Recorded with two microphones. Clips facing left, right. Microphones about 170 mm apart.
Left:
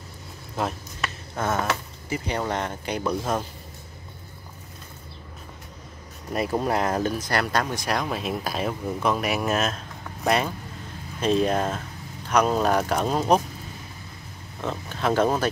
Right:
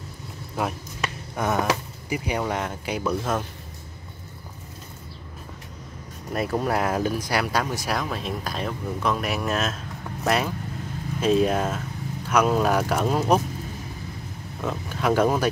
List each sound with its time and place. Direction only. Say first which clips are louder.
0.6 s a sound: right 1 dB; 10° right (ahead or behind)
3.0 s speech: even; 10° left (ahead or behind)
6.7 s speech: even; 5° right (ahead or behind)
14.6 s speech: right 1 dB; 5° right (ahead or behind)